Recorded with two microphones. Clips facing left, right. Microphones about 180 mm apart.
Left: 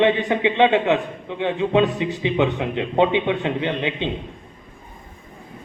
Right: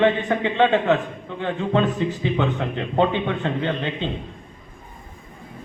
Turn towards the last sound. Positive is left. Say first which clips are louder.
# left 1 dB
turn(degrees=15)  # may be behind; listen again after turning